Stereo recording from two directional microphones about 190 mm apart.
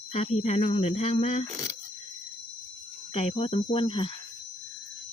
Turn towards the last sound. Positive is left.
turn(degrees=30)  # may be behind; listen again after turning